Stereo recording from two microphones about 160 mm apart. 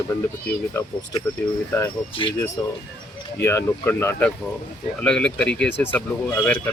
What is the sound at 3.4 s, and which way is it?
Speech, 15° left (ahead or behind).